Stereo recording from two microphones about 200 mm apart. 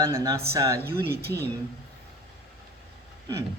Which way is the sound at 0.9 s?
55° right (ahead or behind).